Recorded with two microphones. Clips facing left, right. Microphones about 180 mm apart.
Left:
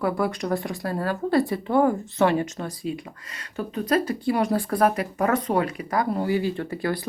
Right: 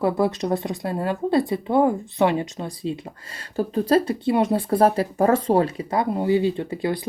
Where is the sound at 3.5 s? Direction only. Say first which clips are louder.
Right 4 dB; 30° right (ahead or behind).